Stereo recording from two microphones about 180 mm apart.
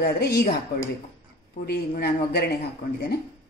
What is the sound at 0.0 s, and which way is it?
Speech, 60° left (ahead or behind).